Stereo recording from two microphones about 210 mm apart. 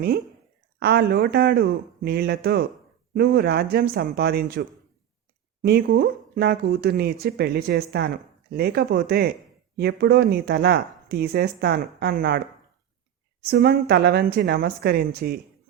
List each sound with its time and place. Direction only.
0.8 s speech: 50° right (ahead or behind)
5.6 s speech: 45° right (ahead or behind)
13.4 s speech: 50° right (ahead or behind)